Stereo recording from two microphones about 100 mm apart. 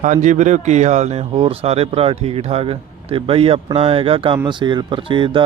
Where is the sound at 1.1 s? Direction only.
80° right; by 4.4 s 65° right (ahead or behind).